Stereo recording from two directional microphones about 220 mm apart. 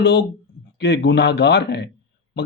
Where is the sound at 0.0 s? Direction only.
50° left (ahead or behind).